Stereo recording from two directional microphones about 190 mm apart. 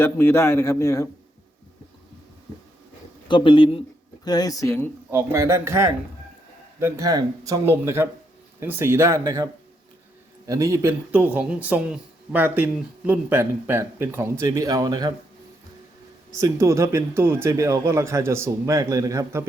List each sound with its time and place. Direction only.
0.0 s a man's voice: 10° left (ahead or behind)
3.2 s speech: 25° left (ahead or behind)
5.1 s speech: 15° right (ahead or behind)
16.3 s speech: 15° right (ahead or behind)